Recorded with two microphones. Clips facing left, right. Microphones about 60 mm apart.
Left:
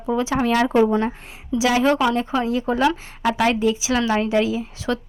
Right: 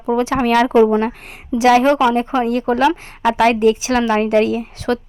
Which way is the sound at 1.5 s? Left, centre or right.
Right.